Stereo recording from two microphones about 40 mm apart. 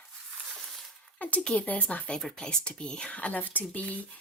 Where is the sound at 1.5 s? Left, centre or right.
Left.